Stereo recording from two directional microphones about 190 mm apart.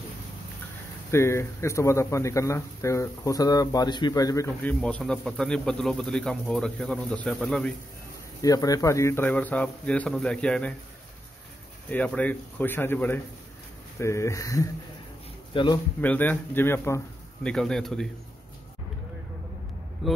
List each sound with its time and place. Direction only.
1.1 s speech: 15° left (ahead or behind)
4.8 s speech: 5° left (ahead or behind)
8.4 s speech: 20° left (ahead or behind)
11.9 s speech: 5° left (ahead or behind); by 15.8 s 25° left (ahead or behind)
16.0 s speech: 10° left (ahead or behind)
20.0 s speech: centre (ahead or behind)